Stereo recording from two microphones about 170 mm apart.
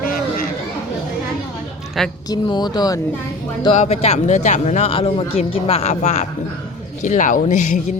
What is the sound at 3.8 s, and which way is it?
Speech, 40° left (ahead or behind).